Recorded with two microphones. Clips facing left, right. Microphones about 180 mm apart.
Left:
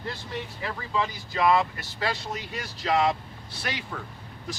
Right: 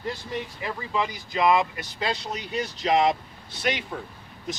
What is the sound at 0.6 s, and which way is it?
Speech, 15° right (ahead or behind).